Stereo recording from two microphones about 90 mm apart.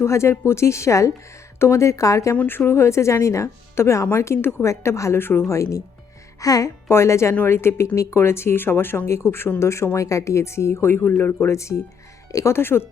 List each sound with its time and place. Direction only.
0.0 s speech: 30° left (ahead or behind)
2.3 s speech: 20° left (ahead or behind)